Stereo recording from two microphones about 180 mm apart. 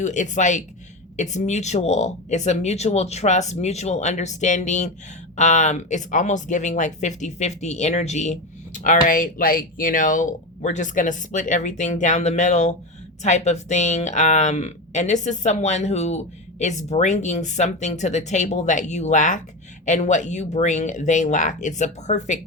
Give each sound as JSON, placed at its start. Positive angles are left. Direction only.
{"t": 0.0, "sound": "speech", "side_deg": 45}